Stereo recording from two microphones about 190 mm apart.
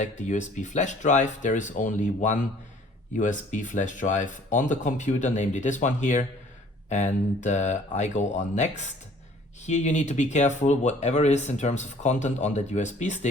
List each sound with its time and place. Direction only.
0.0 s speech: 40° left (ahead or behind)